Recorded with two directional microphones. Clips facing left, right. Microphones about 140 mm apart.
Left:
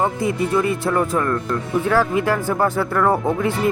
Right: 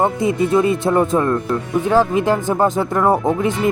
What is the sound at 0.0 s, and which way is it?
A man's voice, 20° right (ahead or behind).